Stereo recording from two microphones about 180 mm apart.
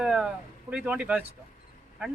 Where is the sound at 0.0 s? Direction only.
5° right (ahead or behind).